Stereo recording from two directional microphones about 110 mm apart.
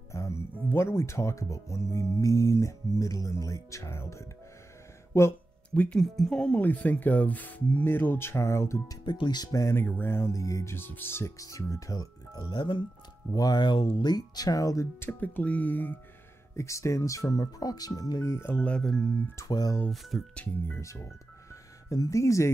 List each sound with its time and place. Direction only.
0.1 s speech: 25° left (ahead or behind)
5.7 s speech: 10° left (ahead or behind); by 8.9 s 25° left (ahead or behind)
9.0 s speech: 40° left (ahead or behind)
12.4 s speech: 45° left (ahead or behind)
15.0 s speech: 15° left (ahead or behind)
16.5 s speech: 25° left (ahead or behind)
18.3 s speech: 20° left (ahead or behind)
18.7 s speech: 5° left (ahead or behind)
19.3 s speech: 35° left (ahead or behind)
19.9 s speech: centre (ahead or behind)
20.3 s speech: 20° left (ahead or behind)